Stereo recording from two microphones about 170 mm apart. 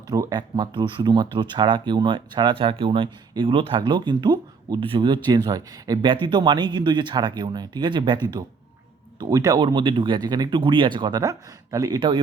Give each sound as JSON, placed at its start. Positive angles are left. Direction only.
{"t": 0.1, "sound": "speech", "side_deg": -25}